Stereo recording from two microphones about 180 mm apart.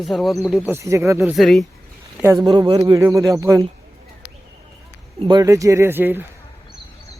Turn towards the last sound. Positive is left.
turn(degrees=-10)  # may be behind; listen again after turning